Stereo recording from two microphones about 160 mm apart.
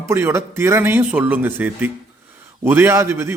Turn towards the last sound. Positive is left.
turn(degrees=-15)  # may be behind; listen again after turning